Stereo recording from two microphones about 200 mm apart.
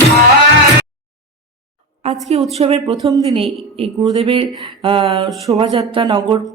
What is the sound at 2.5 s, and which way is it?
A woman's voice, 30° right (ahead or behind).